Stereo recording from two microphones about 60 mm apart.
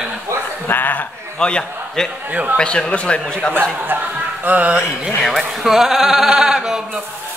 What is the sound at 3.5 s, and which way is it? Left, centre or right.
Speech, right.